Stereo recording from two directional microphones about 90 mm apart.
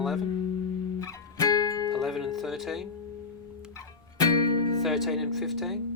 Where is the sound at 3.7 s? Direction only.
40° left (ahead or behind).